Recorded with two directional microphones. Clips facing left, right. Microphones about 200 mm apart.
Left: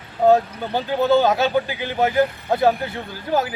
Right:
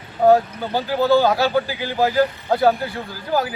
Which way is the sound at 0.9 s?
20° left (ahead or behind).